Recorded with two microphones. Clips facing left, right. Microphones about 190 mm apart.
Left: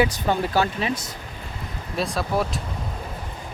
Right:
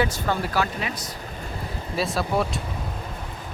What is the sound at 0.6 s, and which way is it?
Speech, 30° left (ahead or behind).